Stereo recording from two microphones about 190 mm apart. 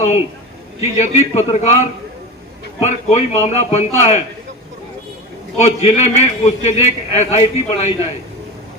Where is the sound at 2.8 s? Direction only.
35° left (ahead or behind).